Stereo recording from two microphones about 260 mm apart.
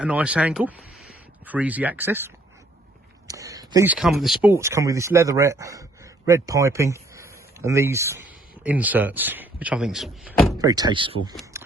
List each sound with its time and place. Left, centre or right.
0.0 s speech: centre
10.6 s speech: centre